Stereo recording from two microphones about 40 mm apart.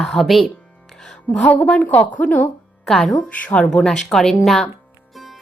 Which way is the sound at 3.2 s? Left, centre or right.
Left.